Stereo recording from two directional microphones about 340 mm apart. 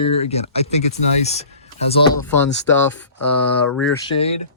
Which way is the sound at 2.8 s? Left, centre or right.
Centre.